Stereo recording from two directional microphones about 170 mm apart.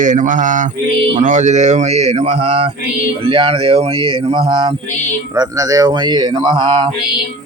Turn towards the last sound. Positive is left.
turn(degrees=-30)  # may be behind; listen again after turning